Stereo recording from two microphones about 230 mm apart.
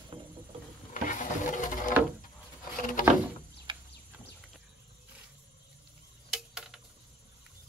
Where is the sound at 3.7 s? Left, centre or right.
Centre.